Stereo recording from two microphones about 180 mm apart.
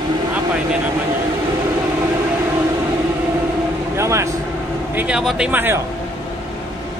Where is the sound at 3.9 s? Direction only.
15° right (ahead or behind).